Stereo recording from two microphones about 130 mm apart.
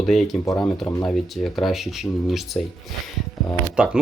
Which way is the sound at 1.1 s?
Centre (ahead or behind).